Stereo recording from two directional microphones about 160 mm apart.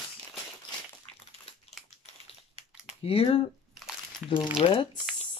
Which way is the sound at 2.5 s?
35° left (ahead or behind).